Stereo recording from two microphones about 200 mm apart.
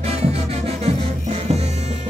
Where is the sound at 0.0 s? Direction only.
30° right (ahead or behind).